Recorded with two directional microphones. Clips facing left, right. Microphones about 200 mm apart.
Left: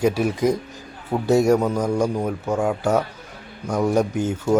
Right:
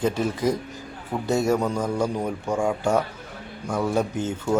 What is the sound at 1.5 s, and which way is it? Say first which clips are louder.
Speech: left 4 dB; 5° left (ahead or behind).